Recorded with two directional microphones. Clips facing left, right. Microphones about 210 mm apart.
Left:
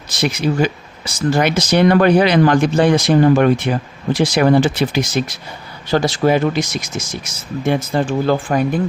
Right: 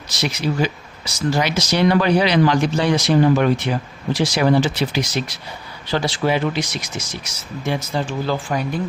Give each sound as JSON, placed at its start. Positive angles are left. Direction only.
{"t": 0.1, "sound": "speech", "side_deg": 55}